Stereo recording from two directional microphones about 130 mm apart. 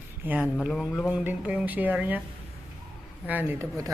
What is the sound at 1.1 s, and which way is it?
Speech, 10° right (ahead or behind).